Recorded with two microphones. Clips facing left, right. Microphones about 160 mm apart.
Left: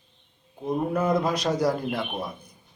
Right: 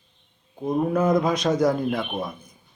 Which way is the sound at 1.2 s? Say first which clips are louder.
Right 3 dB; 10° left (ahead or behind).